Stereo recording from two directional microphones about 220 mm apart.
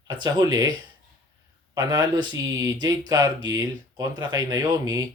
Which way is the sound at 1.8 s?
20° right (ahead or behind).